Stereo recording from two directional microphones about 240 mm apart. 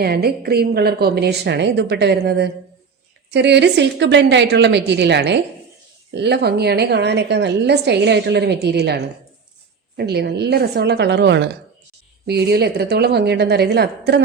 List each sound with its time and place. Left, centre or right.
0.0 s a woman's voice: right
10.0 s a woman's voice: right